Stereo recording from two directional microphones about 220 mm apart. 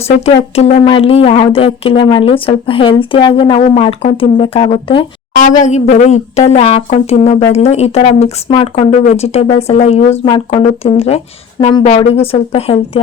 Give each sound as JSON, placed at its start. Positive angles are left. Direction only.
{"t": 0.5, "sound": "speech", "side_deg": 30}
{"t": 5.3, "sound": "speech", "side_deg": 35}